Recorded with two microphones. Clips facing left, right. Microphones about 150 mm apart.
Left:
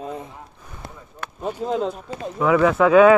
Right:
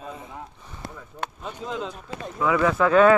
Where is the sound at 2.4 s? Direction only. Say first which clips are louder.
Left 4 dB; 15° left (ahead or behind).